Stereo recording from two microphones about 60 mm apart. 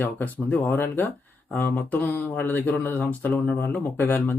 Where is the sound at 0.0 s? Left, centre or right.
Left.